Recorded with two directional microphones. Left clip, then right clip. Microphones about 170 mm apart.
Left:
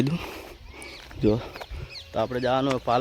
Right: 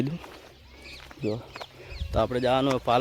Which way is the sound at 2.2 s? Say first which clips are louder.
Even; 10° right (ahead or behind).